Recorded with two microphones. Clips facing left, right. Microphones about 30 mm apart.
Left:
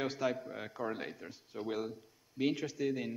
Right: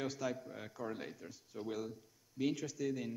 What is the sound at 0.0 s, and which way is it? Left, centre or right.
A man's voice, left.